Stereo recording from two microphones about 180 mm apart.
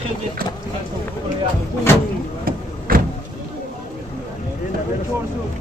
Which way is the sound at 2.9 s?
55° right (ahead or behind).